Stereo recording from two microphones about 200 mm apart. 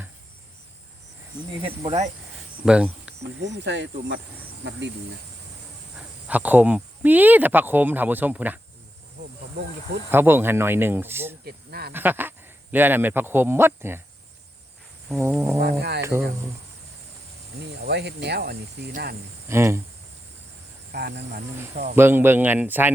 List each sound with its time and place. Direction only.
1.6 s speech: 30° right (ahead or behind)
2.6 s speech: 5° right (ahead or behind)
3.2 s speech: 60° right (ahead or behind)
6.2 s speech: 5° right (ahead or behind)
10.1 s speech: 10° right (ahead or behind)
11.4 s speech: 50° right (ahead or behind)
11.9 s speech: 10° right (ahead or behind)
15.2 s speech: 10° right (ahead or behind)
15.8 s speech: 55° right (ahead or behind)
17.8 s speech: 55° right (ahead or behind)
19.5 s speech: 10° right (ahead or behind)
20.9 s speech: 50° right (ahead or behind)
21.9 s speech: 10° right (ahead or behind)